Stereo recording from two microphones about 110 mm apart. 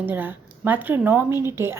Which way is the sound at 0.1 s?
15° right (ahead or behind).